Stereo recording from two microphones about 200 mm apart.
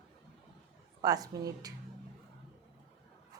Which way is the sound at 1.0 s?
20° right (ahead or behind).